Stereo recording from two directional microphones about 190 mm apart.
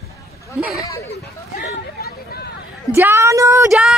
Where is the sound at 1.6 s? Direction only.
55° left (ahead or behind).